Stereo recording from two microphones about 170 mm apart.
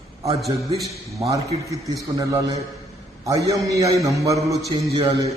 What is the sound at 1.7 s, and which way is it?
Mantra, 20° right (ahead or behind).